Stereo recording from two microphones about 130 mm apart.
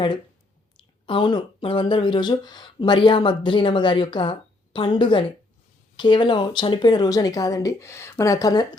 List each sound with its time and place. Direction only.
1.0 s speech: 35° left (ahead or behind)